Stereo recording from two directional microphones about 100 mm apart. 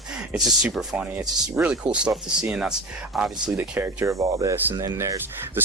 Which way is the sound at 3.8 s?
25° right (ahead or behind).